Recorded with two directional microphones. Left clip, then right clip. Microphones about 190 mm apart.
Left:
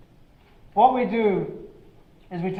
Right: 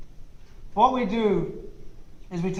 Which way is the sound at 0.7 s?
30° left (ahead or behind).